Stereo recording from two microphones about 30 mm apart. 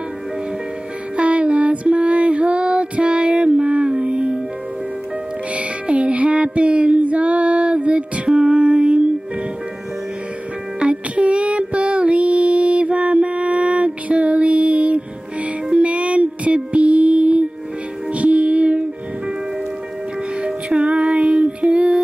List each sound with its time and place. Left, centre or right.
1.2 s music: right
2.0 s female singing: right
5.9 s a sound: right
7.0 s female singing: right
8.4 s music: right
10.8 s music: right
13.1 s mantra: right
14.1 s music: right
20.8 s music: right
21.1 s music: right